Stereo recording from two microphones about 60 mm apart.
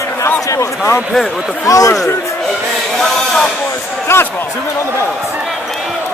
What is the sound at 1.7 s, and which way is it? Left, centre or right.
Speech, left.